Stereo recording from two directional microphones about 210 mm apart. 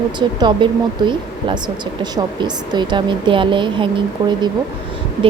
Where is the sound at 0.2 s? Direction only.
20° right (ahead or behind).